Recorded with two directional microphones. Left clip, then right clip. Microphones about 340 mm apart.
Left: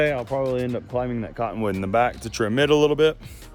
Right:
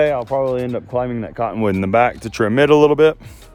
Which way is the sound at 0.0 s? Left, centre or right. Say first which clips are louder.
Right 6 dB; centre.